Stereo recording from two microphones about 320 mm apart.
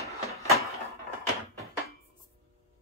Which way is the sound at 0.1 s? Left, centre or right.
Centre.